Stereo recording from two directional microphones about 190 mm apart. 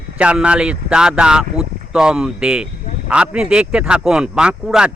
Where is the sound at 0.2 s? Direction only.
5° right (ahead or behind).